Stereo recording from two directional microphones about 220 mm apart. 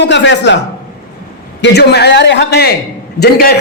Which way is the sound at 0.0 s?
55° left (ahead or behind).